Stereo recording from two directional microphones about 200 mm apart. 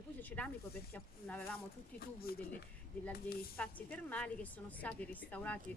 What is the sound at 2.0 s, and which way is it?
Speech, 50° left (ahead or behind).